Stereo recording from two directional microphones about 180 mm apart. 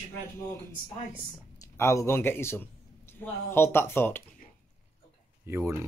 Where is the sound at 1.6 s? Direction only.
15° left (ahead or behind).